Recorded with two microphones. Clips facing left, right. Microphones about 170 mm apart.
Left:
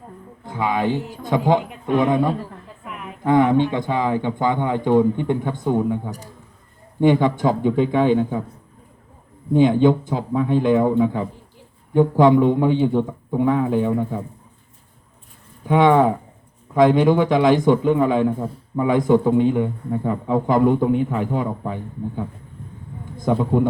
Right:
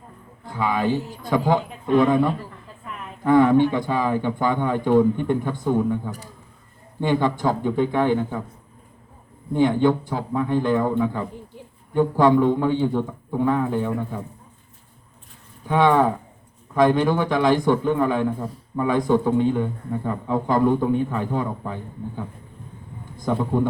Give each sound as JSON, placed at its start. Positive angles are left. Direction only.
{"t": 0.4, "sound": "a man's voice", "side_deg": 20}
{"t": 7.0, "sound": "speech", "side_deg": 20}
{"t": 9.5, "sound": "a man's voice", "side_deg": 20}
{"t": 15.6, "sound": "a man's voice", "side_deg": 20}